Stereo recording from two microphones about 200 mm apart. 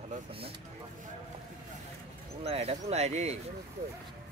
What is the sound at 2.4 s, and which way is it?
Speech, 30° right (ahead or behind).